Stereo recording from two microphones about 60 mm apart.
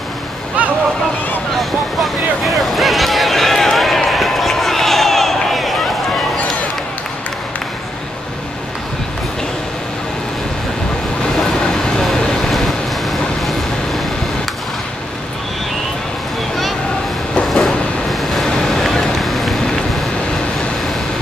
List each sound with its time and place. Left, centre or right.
0.6 s vehicle: right
2.4 s run: centre
11.6 s vehicle: centre
17.5 s vehicle: centre